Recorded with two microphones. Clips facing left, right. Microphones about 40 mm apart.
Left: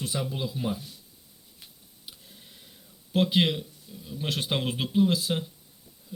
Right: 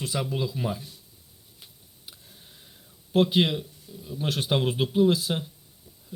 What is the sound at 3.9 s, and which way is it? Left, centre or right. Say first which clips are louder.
Speech: right 2 dB; left.